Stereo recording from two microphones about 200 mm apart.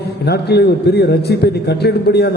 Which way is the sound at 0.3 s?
55° left (ahead or behind).